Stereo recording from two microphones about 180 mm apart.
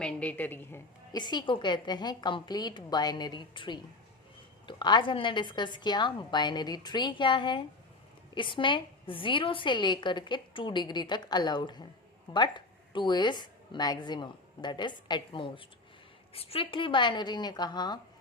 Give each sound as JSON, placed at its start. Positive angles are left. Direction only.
{"t": 0.0, "sound": "a woman's voice", "side_deg": 5}
{"t": 1.1, "sound": "a woman's voice", "side_deg": 25}